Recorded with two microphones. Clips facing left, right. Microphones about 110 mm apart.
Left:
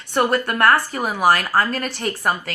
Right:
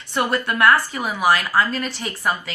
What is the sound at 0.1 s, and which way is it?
A woman's voice, 45° left (ahead or behind).